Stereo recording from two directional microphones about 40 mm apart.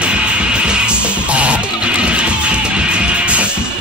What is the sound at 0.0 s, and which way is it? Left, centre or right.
Music, right.